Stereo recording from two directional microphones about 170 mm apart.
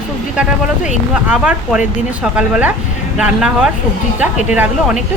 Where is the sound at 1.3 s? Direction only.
5° right (ahead or behind).